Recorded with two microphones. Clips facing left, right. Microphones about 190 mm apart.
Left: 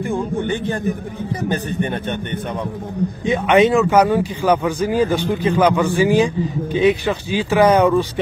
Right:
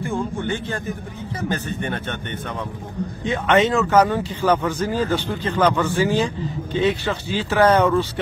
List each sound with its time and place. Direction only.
0.0 s speech: 15° left (ahead or behind)
3.3 s speech: 15° left (ahead or behind)